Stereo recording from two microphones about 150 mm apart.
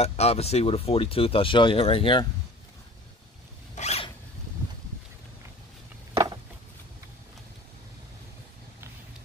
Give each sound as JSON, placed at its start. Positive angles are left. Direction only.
{"t": 0.0, "sound": "speech", "side_deg": 45}
{"t": 3.7, "sound": "zipper", "side_deg": 45}